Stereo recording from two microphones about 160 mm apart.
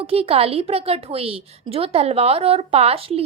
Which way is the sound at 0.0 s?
35° right (ahead or behind).